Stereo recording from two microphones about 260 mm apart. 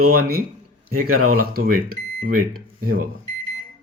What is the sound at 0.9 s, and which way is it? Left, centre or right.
Speech, right.